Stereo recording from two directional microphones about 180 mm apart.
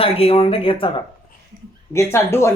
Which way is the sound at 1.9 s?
15° left (ahead or behind).